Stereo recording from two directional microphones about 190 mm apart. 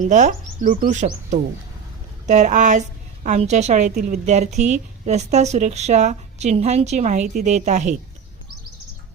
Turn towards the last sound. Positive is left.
turn(degrees=-40)  # may be behind; listen again after turning